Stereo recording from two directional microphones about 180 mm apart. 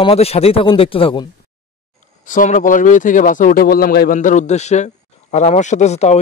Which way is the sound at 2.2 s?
45° left (ahead or behind).